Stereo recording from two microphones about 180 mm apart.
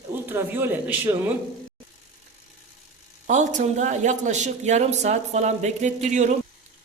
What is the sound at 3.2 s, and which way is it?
Speech, 40° right (ahead or behind).